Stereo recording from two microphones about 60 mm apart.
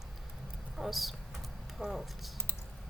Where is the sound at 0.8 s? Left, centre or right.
Centre.